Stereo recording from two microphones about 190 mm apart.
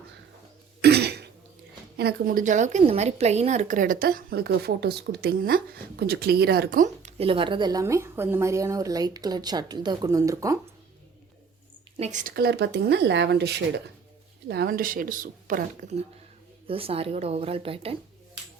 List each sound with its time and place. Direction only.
0.8 s throat clearing: 60° right (ahead or behind)
2.0 s a woman's voice: 50° right (ahead or behind); by 10.6 s 15° right (ahead or behind)
11.9 s a woman's voice: 40° right (ahead or behind)
12.3 s speech: 55° right (ahead or behind)
16.6 s a woman's voice: 30° right (ahead or behind)